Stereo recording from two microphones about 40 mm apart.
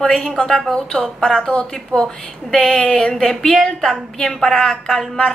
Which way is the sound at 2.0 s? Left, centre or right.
Centre.